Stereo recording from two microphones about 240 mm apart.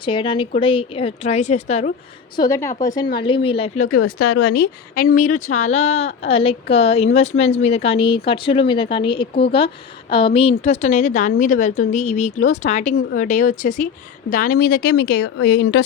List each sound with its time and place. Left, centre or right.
0.0 s a woman's voice: left
2.3 s a woman's voice: centre
3.8 s speech: left
4.2 s a woman's voice: left